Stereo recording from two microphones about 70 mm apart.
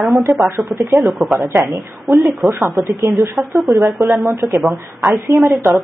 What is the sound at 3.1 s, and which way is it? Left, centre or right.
Speech, right.